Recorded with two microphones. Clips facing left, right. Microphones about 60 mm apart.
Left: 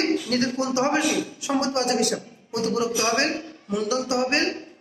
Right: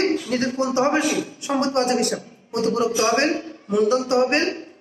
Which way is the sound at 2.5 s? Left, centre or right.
Right.